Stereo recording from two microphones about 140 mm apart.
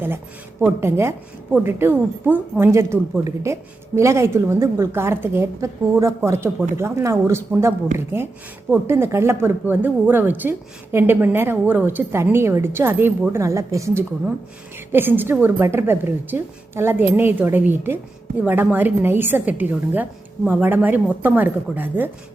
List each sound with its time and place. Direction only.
0.6 s a woman's voice: 20° right (ahead or behind)